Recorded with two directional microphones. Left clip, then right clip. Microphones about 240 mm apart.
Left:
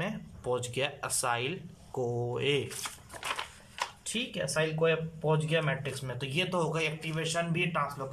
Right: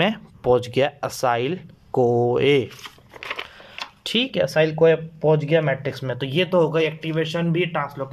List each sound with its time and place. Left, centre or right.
0.0 s speech: right
4.0 s speech: right